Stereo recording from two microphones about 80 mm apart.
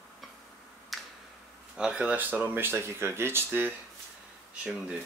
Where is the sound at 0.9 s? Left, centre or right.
Centre.